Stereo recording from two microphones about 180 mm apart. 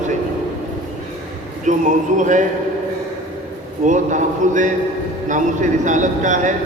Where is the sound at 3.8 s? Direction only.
45° right (ahead or behind).